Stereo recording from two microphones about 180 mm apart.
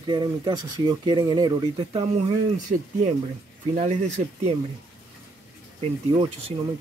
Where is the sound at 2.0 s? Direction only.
40° right (ahead or behind).